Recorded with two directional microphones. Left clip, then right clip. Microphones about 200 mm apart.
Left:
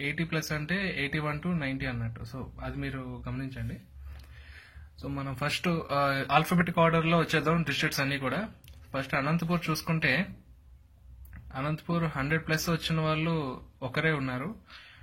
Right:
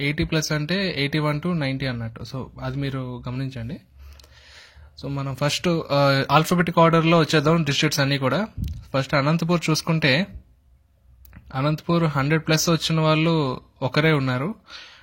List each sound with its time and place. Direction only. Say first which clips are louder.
0.0 s speech: right 8 dB; 40° right (ahead or behind)
5.0 s speech: right 7 dB; 35° right (ahead or behind)
11.5 s speech: right 10 dB; 40° right (ahead or behind)